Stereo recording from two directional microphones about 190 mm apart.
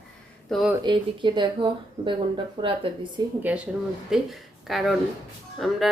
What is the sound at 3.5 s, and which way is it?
A woman's voice, 10° right (ahead or behind).